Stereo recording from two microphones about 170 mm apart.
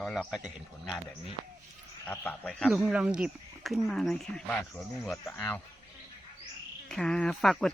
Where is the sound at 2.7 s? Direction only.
5° right (ahead or behind).